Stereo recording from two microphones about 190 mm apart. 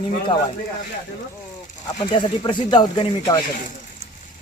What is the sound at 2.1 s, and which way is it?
Speech, 25° left (ahead or behind).